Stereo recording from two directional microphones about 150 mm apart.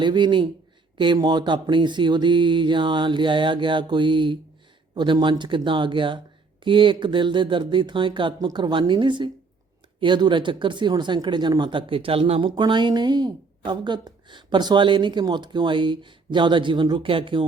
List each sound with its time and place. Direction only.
0.0 s speech: 30° right (ahead or behind)